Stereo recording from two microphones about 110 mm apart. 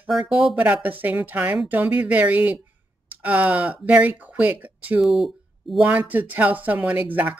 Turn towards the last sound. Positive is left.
turn(degrees=-15)  # may be behind; listen again after turning